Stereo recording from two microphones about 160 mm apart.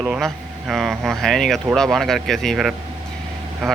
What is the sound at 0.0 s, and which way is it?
Speech, 5° right (ahead or behind).